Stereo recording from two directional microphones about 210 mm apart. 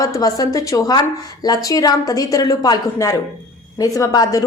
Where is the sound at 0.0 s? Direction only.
15° left (ahead or behind).